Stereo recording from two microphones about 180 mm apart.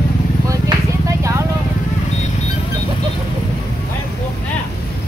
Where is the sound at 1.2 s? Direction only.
15° right (ahead or behind).